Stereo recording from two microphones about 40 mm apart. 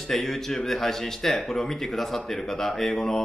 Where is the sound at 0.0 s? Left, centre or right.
Centre.